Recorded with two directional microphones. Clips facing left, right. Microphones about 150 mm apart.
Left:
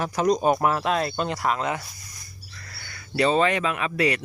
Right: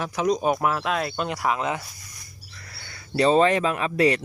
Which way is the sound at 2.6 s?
20° right (ahead or behind).